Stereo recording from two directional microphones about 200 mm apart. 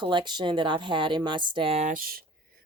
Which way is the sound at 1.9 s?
45° right (ahead or behind).